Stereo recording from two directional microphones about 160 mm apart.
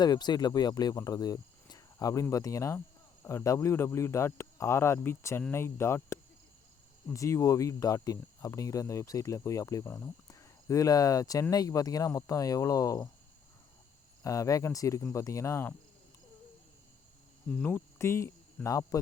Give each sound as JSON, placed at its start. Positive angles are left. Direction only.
{"t": 0.0, "sound": "speech", "side_deg": 25}
{"t": 14.3, "sound": "speech", "side_deg": 20}
{"t": 17.6, "sound": "speech", "side_deg": 15}